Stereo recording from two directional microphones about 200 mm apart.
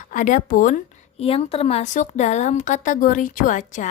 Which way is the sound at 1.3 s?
30° left (ahead or behind).